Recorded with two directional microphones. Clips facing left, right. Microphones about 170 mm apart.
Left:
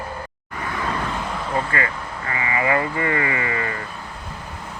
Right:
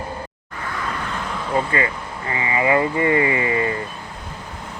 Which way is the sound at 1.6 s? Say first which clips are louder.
Right 4 dB; 25° right (ahead or behind).